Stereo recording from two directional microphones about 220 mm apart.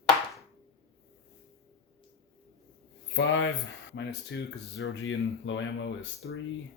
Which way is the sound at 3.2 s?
55° left (ahead or behind).